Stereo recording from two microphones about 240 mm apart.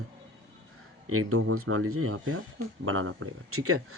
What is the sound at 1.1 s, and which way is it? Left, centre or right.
A man's voice, right.